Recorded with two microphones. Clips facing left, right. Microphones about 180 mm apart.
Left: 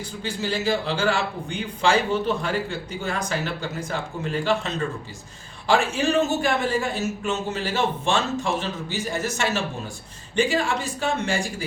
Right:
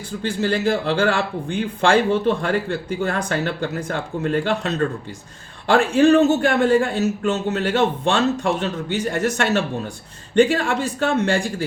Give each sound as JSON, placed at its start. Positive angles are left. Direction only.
{"t": 0.3, "sound": "speech", "side_deg": -55}